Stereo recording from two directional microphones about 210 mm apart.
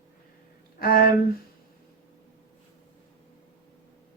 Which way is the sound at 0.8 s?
45° left (ahead or behind).